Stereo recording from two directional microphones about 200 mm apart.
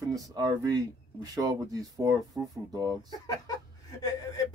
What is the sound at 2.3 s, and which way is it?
Speech, centre (ahead or behind).